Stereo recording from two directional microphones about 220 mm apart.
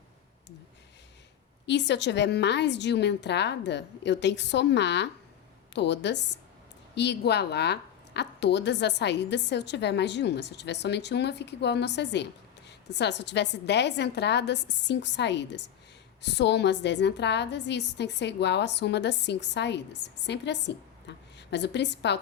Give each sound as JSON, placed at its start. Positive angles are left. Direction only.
{"t": 1.6, "sound": "a woman's voice", "side_deg": 50}